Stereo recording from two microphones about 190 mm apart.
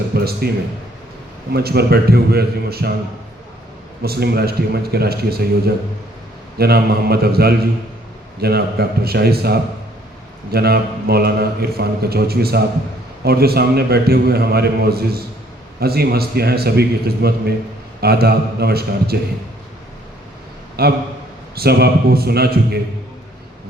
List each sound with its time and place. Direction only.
0.1 s a sound: 55° right (ahead or behind)
1.5 s a man's voice: 55° right (ahead or behind)
4.0 s a man's voice: 55° right (ahead or behind)
20.8 s a man's voice: 55° right (ahead or behind)